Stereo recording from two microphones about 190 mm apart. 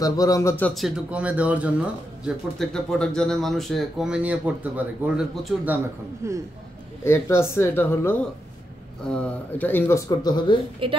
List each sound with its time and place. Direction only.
0.0 s speech: 15° left (ahead or behind); by 5.8 s centre (ahead or behind)
6.2 s speech: 15° right (ahead or behind)
7.1 s speech: 15° left (ahead or behind)
10.8 s a woman's voice: 25° right (ahead or behind)